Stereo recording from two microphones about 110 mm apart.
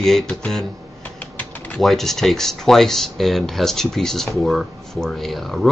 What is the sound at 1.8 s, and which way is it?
Speech, centre (ahead or behind).